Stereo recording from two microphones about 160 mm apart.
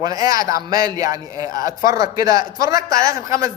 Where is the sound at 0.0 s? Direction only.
20° right (ahead or behind).